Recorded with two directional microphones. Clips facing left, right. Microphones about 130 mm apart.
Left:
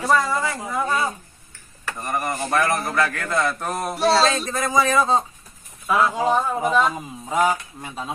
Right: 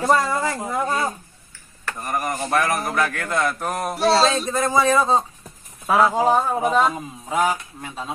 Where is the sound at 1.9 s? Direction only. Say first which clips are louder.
Even; 5° right (ahead or behind).